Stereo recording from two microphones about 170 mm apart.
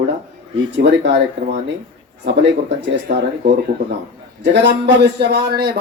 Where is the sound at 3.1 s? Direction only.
65° right (ahead or behind).